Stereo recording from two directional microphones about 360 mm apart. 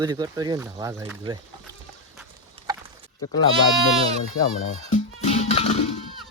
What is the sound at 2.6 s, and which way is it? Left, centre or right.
Horse, centre.